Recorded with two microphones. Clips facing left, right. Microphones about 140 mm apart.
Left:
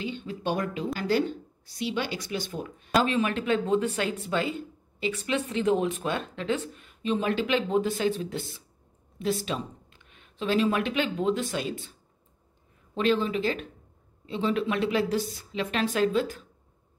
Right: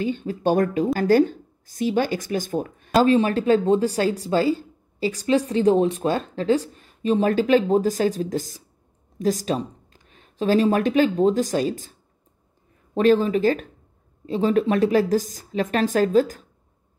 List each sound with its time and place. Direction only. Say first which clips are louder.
0.0 s a woman's voice: right 9 dB; 45° right (ahead or behind)
3.1 s speech: right 8 dB; 35° right (ahead or behind)
12.9 s a woman's voice: right 7 dB; 45° right (ahead or behind)